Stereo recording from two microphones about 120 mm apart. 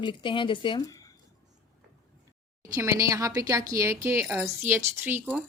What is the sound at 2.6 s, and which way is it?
A woman's voice, 25° right (ahead or behind).